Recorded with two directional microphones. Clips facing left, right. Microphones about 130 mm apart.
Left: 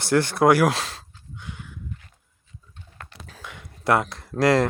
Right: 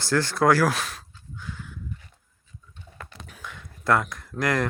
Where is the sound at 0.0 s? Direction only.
20° left (ahead or behind).